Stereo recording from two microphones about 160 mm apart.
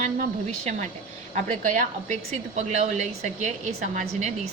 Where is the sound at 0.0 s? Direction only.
50° right (ahead or behind).